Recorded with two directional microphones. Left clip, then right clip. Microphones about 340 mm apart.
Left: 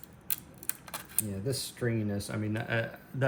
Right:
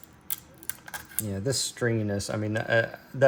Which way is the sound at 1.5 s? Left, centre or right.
Right.